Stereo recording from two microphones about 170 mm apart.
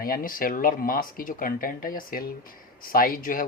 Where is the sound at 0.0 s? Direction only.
55° left (ahead or behind).